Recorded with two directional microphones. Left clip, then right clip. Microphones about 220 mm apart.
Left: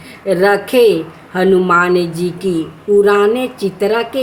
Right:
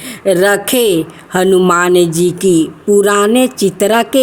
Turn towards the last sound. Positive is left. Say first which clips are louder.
# right 4 dB
turn(degrees=-45)  # may be behind; listen again after turning